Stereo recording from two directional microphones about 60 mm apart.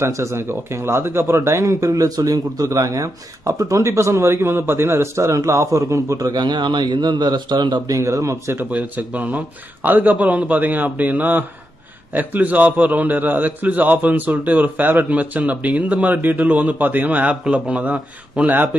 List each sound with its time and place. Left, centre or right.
0.0 s speech: right
1.7 s speech: right
7.9 s speech: right
8.5 s a man's voice: right